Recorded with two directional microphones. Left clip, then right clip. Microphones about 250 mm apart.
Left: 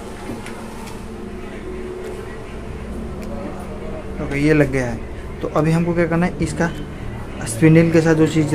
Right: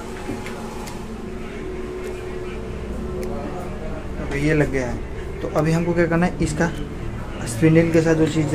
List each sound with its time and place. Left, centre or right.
4.3 s speech: left; by 6.7 s centre
7.6 s speech: centre